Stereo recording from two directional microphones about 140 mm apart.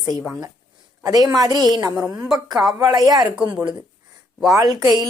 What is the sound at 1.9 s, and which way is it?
Speech, 5° right (ahead or behind).